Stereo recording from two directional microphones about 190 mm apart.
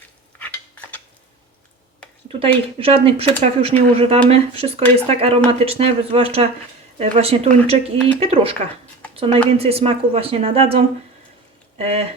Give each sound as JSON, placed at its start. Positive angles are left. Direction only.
{"t": 0.3, "sound": "cutlery", "side_deg": 10}
{"t": 2.4, "sound": "a woman's voice", "side_deg": -30}